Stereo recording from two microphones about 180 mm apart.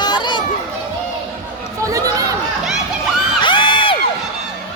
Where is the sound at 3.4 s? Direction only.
30° left (ahead or behind).